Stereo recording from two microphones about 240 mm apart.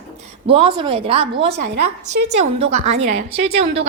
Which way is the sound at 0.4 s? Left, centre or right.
Right.